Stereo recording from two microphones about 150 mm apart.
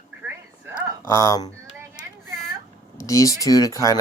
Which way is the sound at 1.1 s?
20° left (ahead or behind).